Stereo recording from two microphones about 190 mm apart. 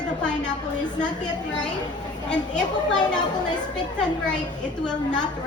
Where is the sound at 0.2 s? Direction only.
5° left (ahead or behind).